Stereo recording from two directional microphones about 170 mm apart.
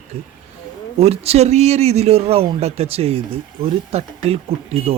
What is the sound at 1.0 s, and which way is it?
A man's voice, 35° right (ahead or behind).